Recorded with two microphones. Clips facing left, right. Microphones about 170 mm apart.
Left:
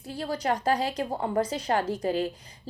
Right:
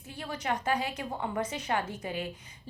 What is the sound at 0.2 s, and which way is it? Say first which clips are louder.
A woman's voice: left 5 dB; 35° left (ahead or behind).